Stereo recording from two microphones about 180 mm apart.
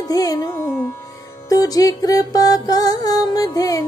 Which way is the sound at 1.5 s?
20° left (ahead or behind).